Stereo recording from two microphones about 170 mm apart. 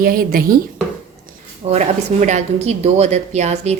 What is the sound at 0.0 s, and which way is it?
Speech, 60° right (ahead or behind).